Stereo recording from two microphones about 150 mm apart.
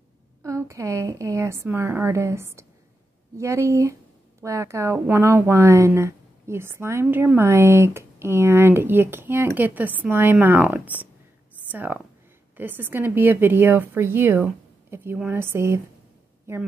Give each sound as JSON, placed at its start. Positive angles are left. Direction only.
{"t": 0.4, "sound": "a woman's voice", "side_deg": -20}